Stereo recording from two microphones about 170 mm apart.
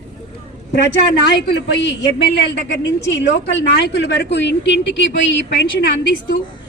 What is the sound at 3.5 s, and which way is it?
A woman's voice, 80° left.